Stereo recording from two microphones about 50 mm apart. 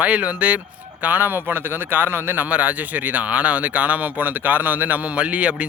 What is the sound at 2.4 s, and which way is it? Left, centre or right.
Speech, right.